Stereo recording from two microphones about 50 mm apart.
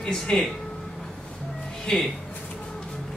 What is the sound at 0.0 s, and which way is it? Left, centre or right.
Speech, centre.